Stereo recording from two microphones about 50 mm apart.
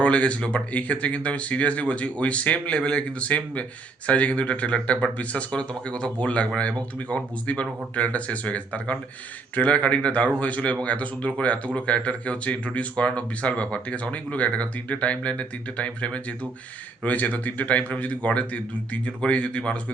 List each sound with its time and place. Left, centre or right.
0.0 s speech: left